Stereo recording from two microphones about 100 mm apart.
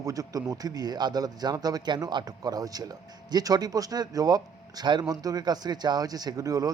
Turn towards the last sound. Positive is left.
turn(degrees=-35)  # may be behind; listen again after turning